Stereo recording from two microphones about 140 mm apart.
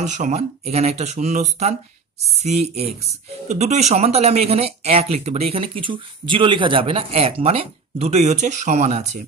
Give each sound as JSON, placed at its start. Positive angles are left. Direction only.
{"t": 0.0, "sound": "speech", "side_deg": -60}